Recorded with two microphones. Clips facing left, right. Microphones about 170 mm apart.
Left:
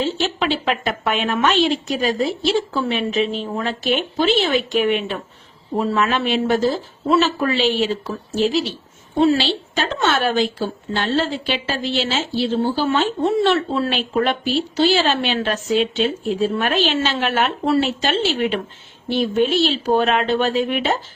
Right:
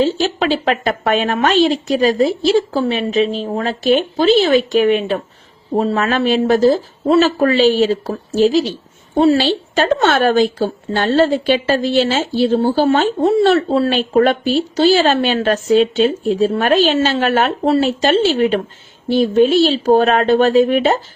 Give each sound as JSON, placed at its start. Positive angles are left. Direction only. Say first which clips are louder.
{"t": 0.0, "sound": "a woman's voice", "louder": "right 5 dB", "side_deg": -40}